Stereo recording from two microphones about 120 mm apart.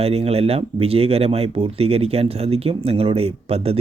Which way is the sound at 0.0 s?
55° right (ahead or behind).